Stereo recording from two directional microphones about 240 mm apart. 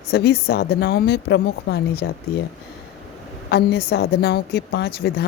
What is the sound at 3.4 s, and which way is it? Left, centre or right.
A woman's voice, left.